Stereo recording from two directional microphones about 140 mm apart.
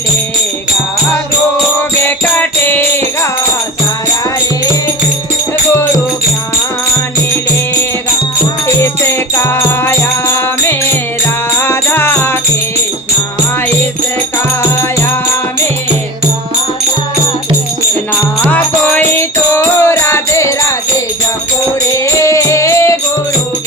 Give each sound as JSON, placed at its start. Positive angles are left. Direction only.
{"t": 2.0, "sound": "music", "side_deg": 15}
{"t": 8.6, "sound": "music", "side_deg": 15}
{"t": 18.5, "sound": "music", "side_deg": 10}
{"t": 21.9, "sound": "music", "side_deg": 20}